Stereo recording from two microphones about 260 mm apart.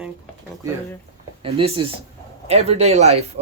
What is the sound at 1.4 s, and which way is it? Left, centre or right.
Speech, right.